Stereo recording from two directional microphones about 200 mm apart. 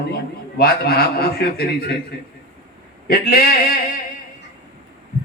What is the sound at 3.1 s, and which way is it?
Speech, 45° left (ahead or behind).